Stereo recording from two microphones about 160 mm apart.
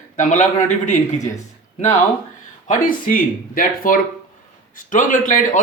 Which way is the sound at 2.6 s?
60° left (ahead or behind).